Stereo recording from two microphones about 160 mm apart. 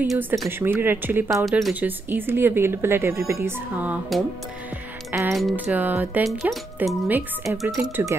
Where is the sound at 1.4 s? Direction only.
Centre (ahead or behind).